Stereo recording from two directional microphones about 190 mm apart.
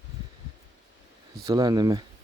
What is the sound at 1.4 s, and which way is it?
Speech, 20° right (ahead or behind).